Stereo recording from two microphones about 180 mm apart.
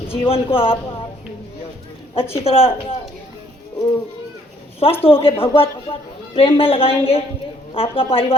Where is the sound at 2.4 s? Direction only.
35° left (ahead or behind).